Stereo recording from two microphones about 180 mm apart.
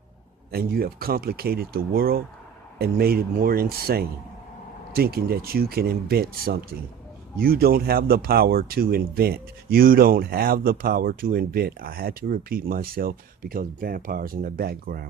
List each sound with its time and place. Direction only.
0.5 s speech: 55° right (ahead or behind)